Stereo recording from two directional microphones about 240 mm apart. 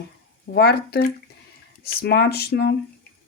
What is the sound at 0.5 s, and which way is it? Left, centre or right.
Speech, left.